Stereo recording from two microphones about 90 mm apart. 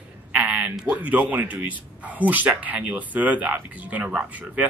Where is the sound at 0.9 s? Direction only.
15° right (ahead or behind).